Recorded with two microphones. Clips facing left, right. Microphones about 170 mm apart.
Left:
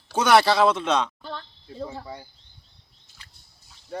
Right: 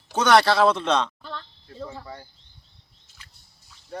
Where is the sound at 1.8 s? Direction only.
15° left (ahead or behind).